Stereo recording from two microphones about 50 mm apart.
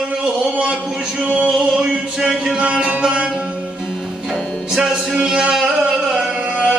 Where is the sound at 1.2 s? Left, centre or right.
Right.